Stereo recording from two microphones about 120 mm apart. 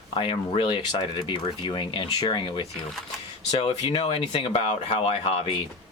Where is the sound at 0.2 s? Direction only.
45° left (ahead or behind).